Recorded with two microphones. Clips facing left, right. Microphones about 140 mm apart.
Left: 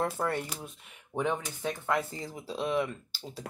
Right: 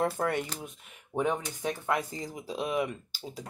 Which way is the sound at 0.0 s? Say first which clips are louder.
Right 2 dB; 15° right (ahead or behind).